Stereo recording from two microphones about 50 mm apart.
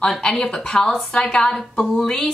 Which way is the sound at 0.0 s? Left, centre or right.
Centre.